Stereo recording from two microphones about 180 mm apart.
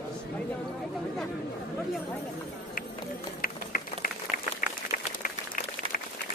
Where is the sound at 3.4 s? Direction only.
50° left (ahead or behind).